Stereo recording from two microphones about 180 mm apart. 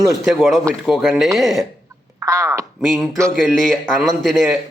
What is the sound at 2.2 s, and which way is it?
Crow, 15° right (ahead or behind).